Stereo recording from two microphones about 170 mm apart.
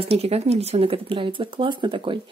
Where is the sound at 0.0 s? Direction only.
35° right (ahead or behind).